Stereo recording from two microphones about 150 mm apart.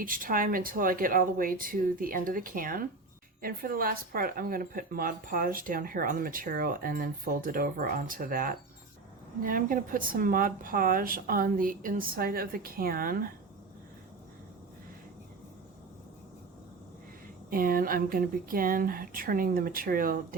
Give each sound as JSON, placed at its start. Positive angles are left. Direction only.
{"t": 0.0, "sound": "speech", "side_deg": -70}
{"t": 17.5, "sound": "speech", "side_deg": -75}